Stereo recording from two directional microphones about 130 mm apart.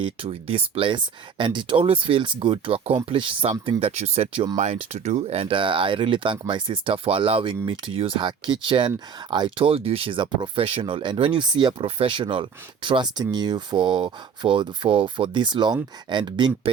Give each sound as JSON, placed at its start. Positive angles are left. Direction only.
{"t": 0.0, "sound": "speech", "side_deg": -45}